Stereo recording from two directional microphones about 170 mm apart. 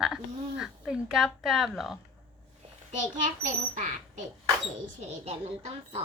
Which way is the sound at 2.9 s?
50° right (ahead or behind).